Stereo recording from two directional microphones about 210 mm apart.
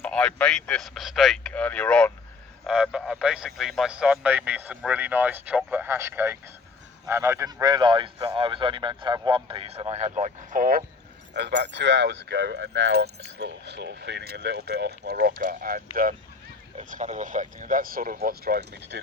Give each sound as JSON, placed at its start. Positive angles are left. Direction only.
{"t": 0.0, "sound": "speech", "side_deg": 5}
{"t": 11.3, "sound": "speech", "side_deg": -55}